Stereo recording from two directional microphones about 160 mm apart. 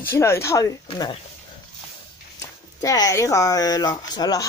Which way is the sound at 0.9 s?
35° left (ahead or behind).